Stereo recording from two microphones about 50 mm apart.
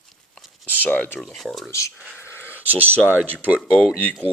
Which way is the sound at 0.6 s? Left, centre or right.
Right.